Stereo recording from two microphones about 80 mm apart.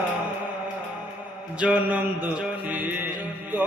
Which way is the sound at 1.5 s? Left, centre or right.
Centre.